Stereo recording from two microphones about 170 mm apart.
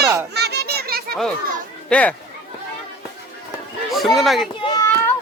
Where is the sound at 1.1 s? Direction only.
5° left (ahead or behind).